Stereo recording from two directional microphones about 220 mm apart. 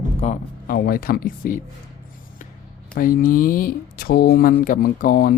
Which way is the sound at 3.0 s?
40° left (ahead or behind).